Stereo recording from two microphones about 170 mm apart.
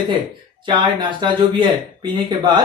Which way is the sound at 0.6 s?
30° right (ahead or behind).